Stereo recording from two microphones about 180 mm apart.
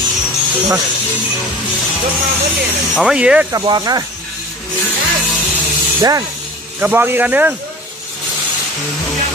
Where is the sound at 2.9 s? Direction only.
5° right (ahead or behind).